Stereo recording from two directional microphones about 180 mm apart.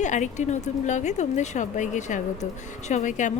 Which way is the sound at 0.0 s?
45° left (ahead or behind).